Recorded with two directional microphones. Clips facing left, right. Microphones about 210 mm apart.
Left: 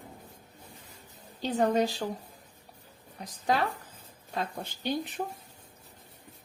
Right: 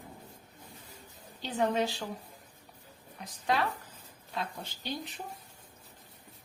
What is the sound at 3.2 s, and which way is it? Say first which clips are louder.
Speech: left 2 dB; 35° left (ahead or behind).